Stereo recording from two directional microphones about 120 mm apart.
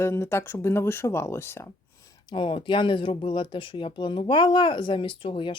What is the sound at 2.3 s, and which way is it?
Speech, 45° left (ahead or behind).